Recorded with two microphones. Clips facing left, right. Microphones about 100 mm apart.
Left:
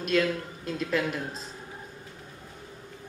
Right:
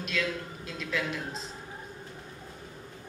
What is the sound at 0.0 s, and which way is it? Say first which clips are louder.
A man's voice: left 7 dB; 45° left (ahead or behind).